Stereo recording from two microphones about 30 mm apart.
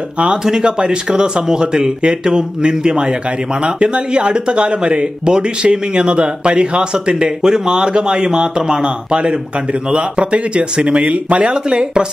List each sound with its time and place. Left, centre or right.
0.4 s speech: right
9.1 s speech: right
11.1 s speech: right
11.4 s speech: right